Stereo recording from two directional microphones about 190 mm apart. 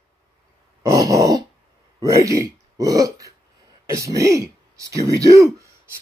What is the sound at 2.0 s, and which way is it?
Speech, 20° right (ahead or behind).